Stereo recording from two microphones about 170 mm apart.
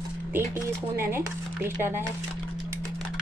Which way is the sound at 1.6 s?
15° right (ahead or behind).